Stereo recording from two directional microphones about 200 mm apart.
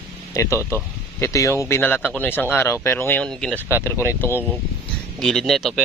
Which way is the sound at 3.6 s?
10° right (ahead or behind).